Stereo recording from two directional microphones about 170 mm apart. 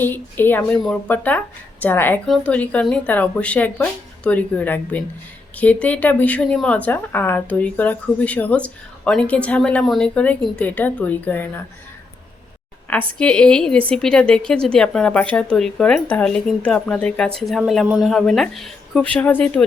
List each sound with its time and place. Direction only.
0.0 s a woman's voice: 10° left (ahead or behind)
13.1 s speech: 5° left (ahead or behind)